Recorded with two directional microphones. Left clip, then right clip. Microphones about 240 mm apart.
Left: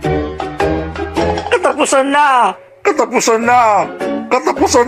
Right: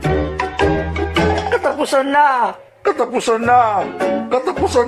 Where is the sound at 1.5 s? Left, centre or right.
Left.